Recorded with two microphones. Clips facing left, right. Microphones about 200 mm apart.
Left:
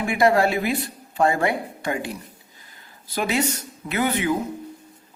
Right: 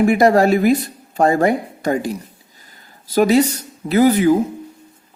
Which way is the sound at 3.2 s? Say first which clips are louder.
Right 10 dB; 35° right (ahead or behind).